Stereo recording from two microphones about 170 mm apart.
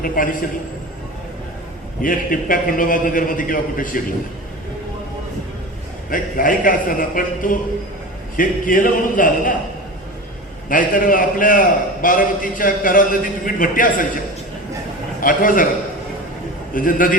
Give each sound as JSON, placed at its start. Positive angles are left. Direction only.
{"t": 0.0, "sound": "a man's voice", "side_deg": 55}
{"t": 2.0, "sound": "a man's voice", "side_deg": 55}
{"t": 6.1, "sound": "a man's voice", "side_deg": 55}
{"t": 10.7, "sound": "a man's voice", "side_deg": 55}
{"t": 15.2, "sound": "a man's voice", "side_deg": 55}
{"t": 16.7, "sound": "a man's voice", "side_deg": 55}